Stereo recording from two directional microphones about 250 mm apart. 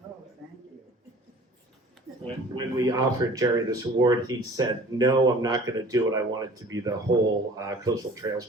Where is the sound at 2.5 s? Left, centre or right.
Centre.